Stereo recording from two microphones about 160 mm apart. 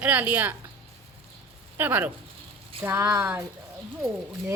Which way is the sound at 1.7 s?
10° right (ahead or behind).